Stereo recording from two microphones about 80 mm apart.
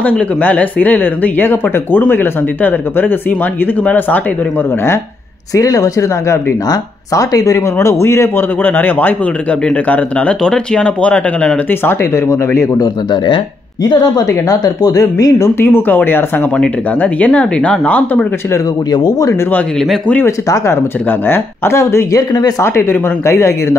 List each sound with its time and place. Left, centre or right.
0.0 s speech: centre
5.5 s speech: left
8.6 s speech: left
11.8 s speech: left
12.7 s speech: left
15.6 s speech: left
18.9 s speech: left
20.2 s speech: left